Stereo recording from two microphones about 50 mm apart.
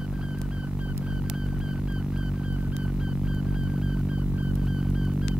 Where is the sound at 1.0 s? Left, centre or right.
Centre.